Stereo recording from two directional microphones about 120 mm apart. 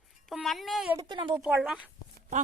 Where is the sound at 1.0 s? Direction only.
40° right (ahead or behind).